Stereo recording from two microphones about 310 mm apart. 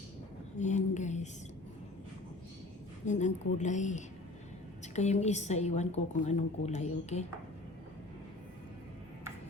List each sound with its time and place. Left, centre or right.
0.6 s a woman's voice: left
3.1 s a woman's voice: left